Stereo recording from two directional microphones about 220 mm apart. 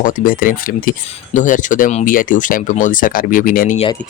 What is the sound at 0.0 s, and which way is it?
Speech, 40° left (ahead or behind).